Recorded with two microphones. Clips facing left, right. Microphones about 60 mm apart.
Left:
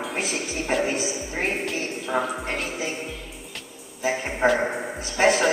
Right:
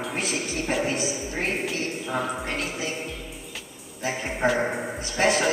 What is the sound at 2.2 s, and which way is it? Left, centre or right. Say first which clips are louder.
Speech: left 1 dB; centre.